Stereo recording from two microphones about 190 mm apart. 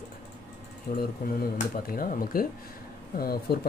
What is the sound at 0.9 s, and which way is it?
Speech, 50° left (ahead or behind).